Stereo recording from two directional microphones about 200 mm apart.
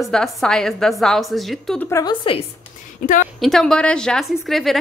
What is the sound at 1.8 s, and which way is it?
Speech, 15° left (ahead or behind).